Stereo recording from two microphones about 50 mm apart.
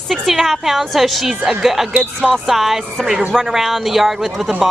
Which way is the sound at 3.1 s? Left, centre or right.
Centre.